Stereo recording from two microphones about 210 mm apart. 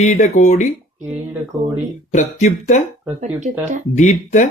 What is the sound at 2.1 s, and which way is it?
Speech, 35° left (ahead or behind).